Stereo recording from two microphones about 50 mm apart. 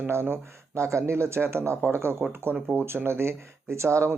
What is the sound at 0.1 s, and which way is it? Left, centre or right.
Speech, right.